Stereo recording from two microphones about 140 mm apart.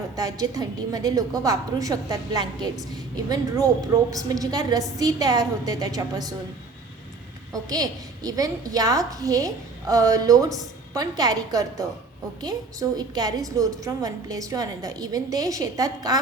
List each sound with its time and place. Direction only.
0.2 s a woman's voice: 25° right (ahead or behind)
7.5 s a woman's voice: 25° right (ahead or behind)